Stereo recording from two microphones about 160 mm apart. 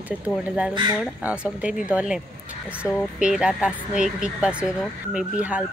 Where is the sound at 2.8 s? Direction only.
20° left (ahead or behind).